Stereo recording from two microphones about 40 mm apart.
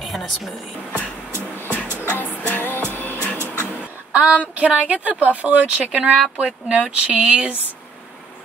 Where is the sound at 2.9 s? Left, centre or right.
Left.